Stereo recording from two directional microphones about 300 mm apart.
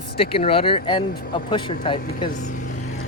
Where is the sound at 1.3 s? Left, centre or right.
Centre.